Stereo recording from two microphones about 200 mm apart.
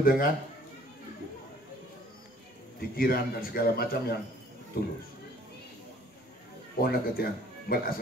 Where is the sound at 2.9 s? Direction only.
45° left (ahead or behind).